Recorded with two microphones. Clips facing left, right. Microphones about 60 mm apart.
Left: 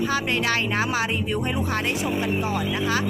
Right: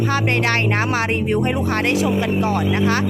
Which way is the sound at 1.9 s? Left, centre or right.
Right.